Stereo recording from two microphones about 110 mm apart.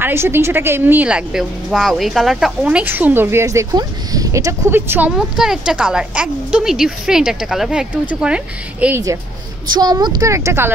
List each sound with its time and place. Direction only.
0.0 s speech: 20° right (ahead or behind)
5.1 s a woman's voice: 5° right (ahead or behind)
9.7 s speech: 40° right (ahead or behind)